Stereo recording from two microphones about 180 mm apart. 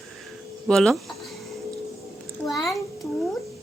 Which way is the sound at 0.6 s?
Centre (ahead or behind).